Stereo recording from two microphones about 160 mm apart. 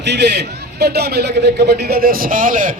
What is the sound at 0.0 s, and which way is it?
A man's voice, 90° right.